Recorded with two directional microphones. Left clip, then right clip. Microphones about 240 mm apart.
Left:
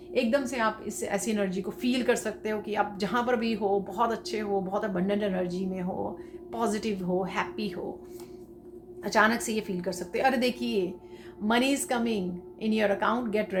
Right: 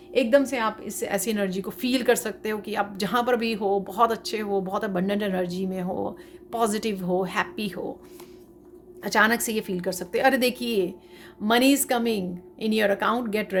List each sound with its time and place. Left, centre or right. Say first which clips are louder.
0.1 s a woman's voice: right 6 dB; right
9.0 s a woman's voice: right 3 dB; right